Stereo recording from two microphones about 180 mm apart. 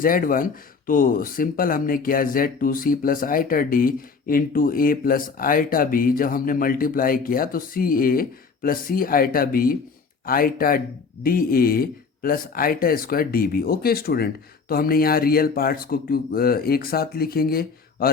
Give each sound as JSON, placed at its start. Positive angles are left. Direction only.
{"t": 0.0, "sound": "speech", "side_deg": 50}